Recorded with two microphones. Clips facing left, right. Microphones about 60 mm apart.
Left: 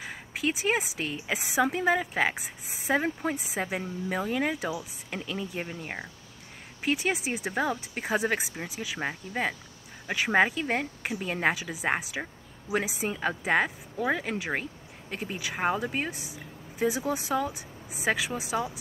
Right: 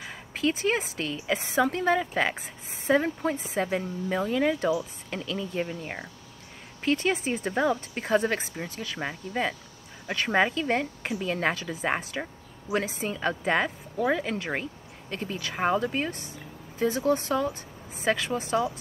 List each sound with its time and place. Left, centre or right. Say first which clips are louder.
0.4 s speech: right 2 dB; centre